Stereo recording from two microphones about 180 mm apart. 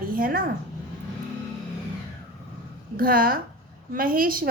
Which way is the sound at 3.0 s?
55° right (ahead or behind).